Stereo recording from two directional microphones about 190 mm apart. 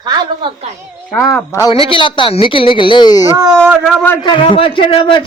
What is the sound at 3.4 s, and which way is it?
Speech, 20° right (ahead or behind).